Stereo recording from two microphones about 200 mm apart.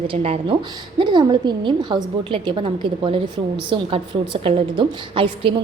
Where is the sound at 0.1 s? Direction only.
30° right (ahead or behind).